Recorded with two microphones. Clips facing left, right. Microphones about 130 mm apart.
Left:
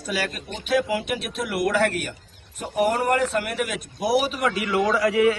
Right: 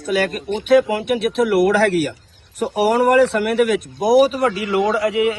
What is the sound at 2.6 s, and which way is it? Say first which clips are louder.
Speech: right 6 dB; 90° right.